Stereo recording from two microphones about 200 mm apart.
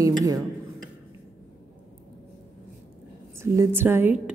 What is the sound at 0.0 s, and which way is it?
Speech, 15° right (ahead or behind).